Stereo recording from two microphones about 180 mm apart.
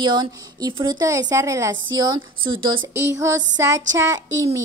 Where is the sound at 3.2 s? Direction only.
15° right (ahead or behind).